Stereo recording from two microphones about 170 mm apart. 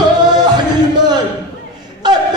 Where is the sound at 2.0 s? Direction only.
25° right (ahead or behind).